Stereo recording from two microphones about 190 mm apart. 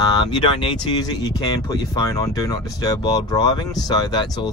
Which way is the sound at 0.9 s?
20° left (ahead or behind).